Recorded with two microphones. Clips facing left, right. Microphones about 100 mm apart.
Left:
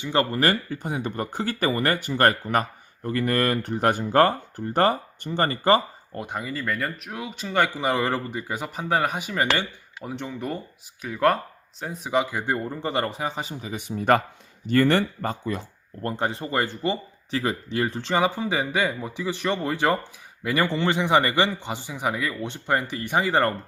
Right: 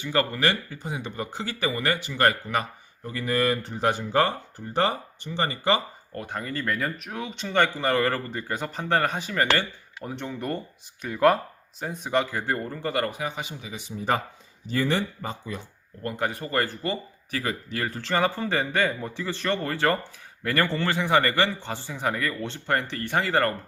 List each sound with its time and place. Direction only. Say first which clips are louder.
0.0 s speech: left 2 dB; 25° left (ahead or behind)
0.3 s speech: left 3 dB; 45° left (ahead or behind)
6.1 s speech: left 2 dB; 15° left (ahead or behind)
6.5 s speech: right 2 dB; centre (ahead or behind)
7.8 s speech: even; 15° left (ahead or behind)
10.0 s speech: left 1 dB; centre (ahead or behind); by 15.6 s 55° left (ahead or behind)
16.0 s speech: left 2 dB; 30° left (ahead or behind)